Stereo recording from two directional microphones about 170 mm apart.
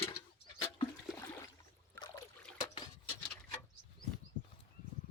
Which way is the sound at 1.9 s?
25° left (ahead or behind).